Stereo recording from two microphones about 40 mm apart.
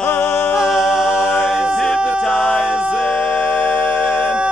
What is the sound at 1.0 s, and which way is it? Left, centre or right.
A capella, left.